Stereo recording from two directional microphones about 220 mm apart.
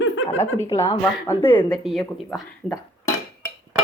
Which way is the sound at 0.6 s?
15° left (ahead or behind).